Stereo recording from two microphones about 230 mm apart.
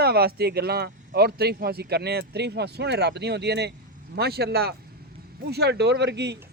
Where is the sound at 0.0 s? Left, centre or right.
Right.